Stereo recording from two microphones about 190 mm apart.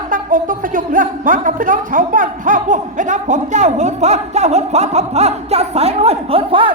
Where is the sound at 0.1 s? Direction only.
45° right (ahead or behind).